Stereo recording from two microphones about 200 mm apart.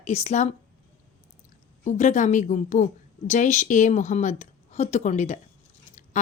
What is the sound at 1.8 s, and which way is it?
A woman's voice, 40° left (ahead or behind).